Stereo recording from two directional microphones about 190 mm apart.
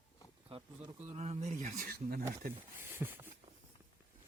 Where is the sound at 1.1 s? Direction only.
35° right (ahead or behind).